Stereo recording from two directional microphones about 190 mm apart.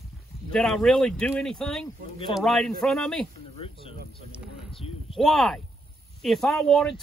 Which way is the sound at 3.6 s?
30° left (ahead or behind).